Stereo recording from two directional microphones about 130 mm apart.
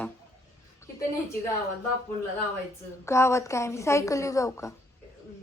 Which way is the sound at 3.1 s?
20° left (ahead or behind).